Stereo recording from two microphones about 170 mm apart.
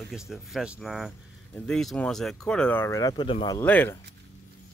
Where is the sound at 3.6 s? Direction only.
10° left (ahead or behind).